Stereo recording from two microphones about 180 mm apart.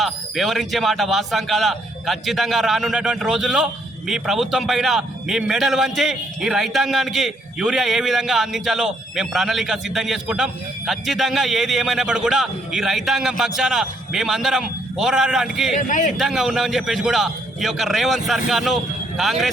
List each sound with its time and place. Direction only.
0.0 s speech: centre (ahead or behind)
15.8 s a man's voice: 45° left (ahead or behind)
16.1 s speech: centre (ahead or behind)